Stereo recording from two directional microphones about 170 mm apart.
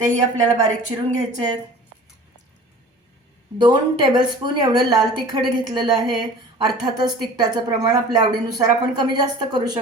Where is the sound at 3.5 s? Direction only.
25° right (ahead or behind).